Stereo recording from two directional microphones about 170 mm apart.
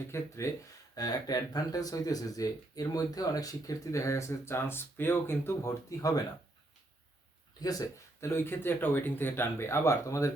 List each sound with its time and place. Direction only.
0.1 s speech: 15° left (ahead or behind)
7.6 s speech: 20° left (ahead or behind)